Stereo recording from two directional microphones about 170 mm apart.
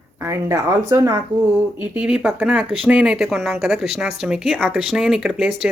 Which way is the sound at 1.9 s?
10° right (ahead or behind).